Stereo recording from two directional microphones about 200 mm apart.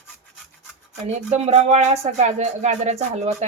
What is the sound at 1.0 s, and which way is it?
Speech, 35° right (ahead or behind).